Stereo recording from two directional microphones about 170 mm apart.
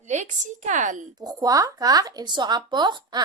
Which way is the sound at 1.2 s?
25° right (ahead or behind).